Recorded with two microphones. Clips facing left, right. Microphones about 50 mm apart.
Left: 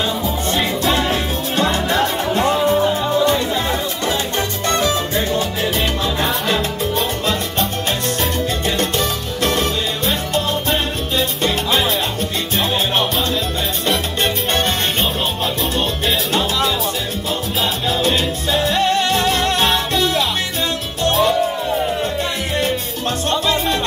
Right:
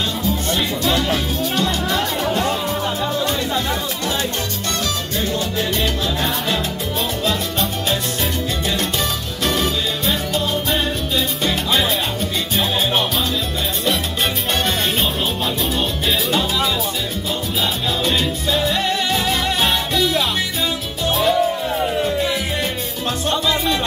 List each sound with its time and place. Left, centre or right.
2.3 s music: left
2.8 s music: centre
4.6 s salsa music: left
9.5 s music: centre
16.3 s music: centre
18.0 s music: centre